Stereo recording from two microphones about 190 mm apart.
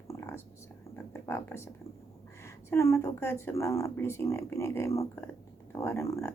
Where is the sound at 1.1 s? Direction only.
15° left (ahead or behind).